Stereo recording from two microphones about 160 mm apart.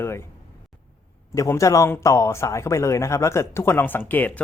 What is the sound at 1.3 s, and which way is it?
Speech, 20° left (ahead or behind).